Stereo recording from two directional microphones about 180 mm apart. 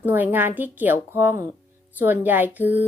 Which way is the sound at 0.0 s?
10° right (ahead or behind).